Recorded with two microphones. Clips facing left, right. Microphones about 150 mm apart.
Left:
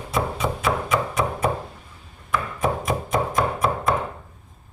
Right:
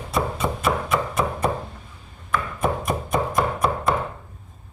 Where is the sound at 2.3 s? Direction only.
Centre (ahead or behind).